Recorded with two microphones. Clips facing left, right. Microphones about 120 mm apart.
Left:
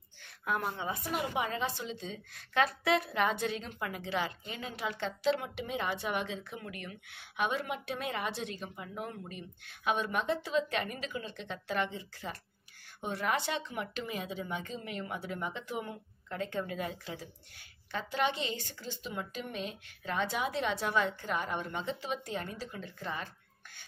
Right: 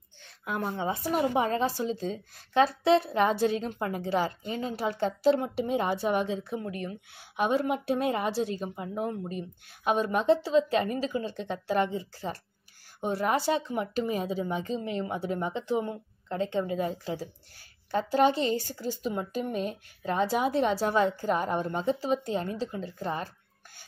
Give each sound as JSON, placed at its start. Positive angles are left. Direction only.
{"t": 0.5, "sound": "speech", "side_deg": -25}